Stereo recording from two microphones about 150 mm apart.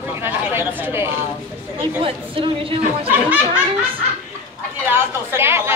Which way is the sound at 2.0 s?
35° right (ahead or behind).